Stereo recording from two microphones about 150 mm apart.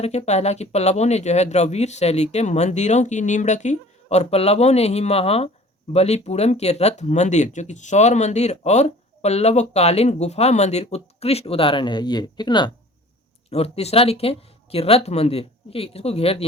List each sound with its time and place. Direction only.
0.0 s speech: 45° left (ahead or behind); by 12.7 s 30° left (ahead or behind)
13.5 s speech: 45° left (ahead or behind)